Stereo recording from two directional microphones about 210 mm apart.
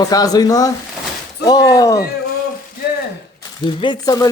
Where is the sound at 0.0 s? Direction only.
15° left (ahead or behind).